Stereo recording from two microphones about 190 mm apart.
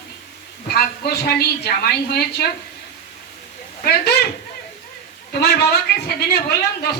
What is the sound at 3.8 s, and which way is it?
Speech, 55° left (ahead or behind).